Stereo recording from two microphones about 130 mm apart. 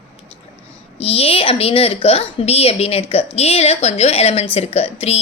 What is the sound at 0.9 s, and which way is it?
A woman's voice, 50° left (ahead or behind).